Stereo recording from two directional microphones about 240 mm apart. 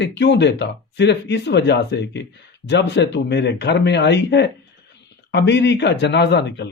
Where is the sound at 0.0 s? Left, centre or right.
Left.